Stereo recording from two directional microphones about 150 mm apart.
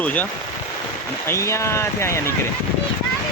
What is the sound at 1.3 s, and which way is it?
Speech, 20° left (ahead or behind).